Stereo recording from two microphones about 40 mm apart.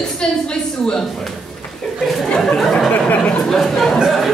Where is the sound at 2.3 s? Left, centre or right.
Centre.